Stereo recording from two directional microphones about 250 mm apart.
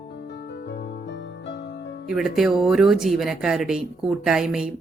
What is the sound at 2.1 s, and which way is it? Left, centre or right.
Speech, centre.